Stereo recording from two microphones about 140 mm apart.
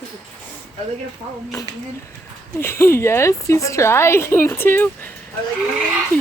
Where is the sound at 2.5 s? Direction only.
20° left (ahead or behind).